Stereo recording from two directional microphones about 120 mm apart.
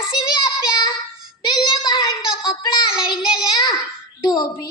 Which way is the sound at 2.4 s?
40° left (ahead or behind).